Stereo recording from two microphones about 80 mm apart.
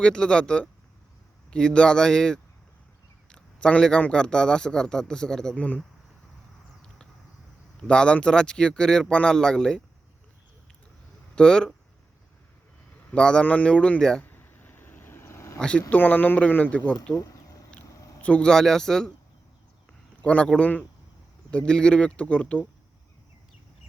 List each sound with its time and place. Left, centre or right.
0.0 s a man's voice: centre
7.8 s a man's voice: centre
11.3 s a man's voice: centre
13.1 s a man's voice: centre
14.3 s a sound: left
15.5 s speech: centre
15.9 s speech: left
17.2 s a sound: left
18.2 s a man's voice: centre
18.5 s a man's voice: centre
20.2 s a man's voice: centre